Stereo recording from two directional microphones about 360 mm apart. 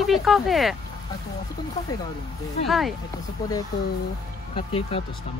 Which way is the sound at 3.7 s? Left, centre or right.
Centre.